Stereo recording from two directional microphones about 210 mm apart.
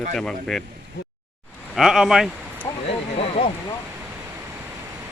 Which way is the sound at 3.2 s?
30° left (ahead or behind).